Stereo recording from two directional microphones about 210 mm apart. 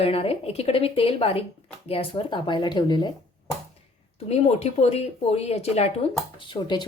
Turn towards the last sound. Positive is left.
turn(degrees=20)  # may be behind; listen again after turning